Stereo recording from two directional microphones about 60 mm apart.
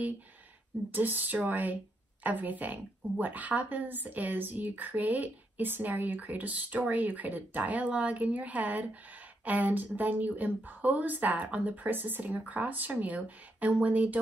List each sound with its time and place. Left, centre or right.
0.9 s a woman's voice: right